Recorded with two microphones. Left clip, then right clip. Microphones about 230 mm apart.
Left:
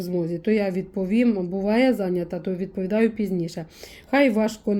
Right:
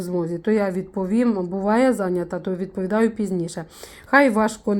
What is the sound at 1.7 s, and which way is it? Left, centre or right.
Speech, right.